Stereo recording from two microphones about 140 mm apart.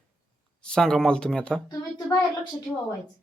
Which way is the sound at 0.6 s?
5° left (ahead or behind).